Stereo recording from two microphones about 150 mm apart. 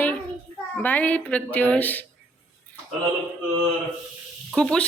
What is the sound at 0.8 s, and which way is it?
Speech, 10° left (ahead or behind).